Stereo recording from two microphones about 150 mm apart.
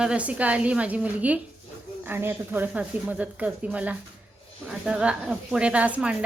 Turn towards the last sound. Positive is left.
turn(degrees=-10)  # may be behind; listen again after turning